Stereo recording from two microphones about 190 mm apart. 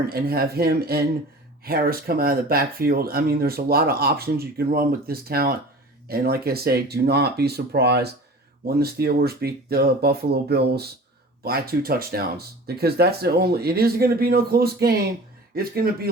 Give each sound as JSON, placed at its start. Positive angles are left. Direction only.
{"t": 0.0, "sound": "speech", "side_deg": -55}